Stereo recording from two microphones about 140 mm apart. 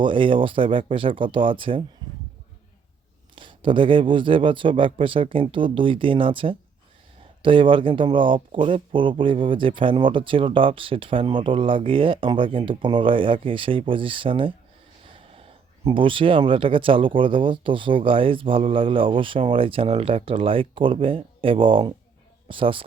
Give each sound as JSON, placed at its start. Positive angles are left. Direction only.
{"t": 0.0, "sound": "speech", "side_deg": -35}
{"t": 3.3, "sound": "speech", "side_deg": -35}